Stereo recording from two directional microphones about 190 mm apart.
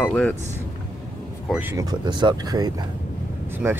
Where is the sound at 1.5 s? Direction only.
10° right (ahead or behind).